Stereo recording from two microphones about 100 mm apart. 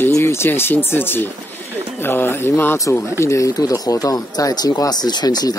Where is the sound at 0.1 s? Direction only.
25° left (ahead or behind).